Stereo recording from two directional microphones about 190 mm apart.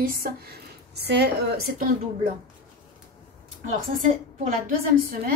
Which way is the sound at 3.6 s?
40° right (ahead or behind).